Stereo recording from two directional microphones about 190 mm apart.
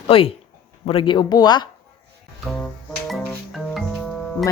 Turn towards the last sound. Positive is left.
turn(degrees=5)  # may be behind; listen again after turning